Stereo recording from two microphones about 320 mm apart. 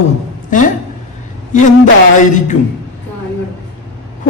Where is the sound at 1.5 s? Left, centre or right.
Left.